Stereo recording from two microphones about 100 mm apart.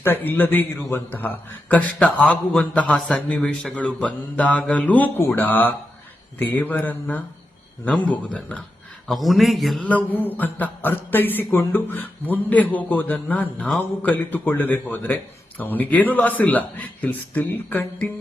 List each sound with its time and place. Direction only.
0.0 s a man's voice: 20° left (ahead or behind)
9.0 s a man's voice: centre (ahead or behind)
9.8 s a man's voice: 15° left (ahead or behind)